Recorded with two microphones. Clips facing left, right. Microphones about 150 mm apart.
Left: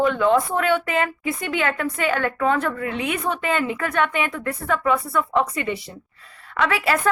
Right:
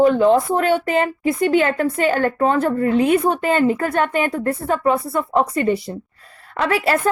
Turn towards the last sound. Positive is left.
turn(degrees=-40)  # may be behind; listen again after turning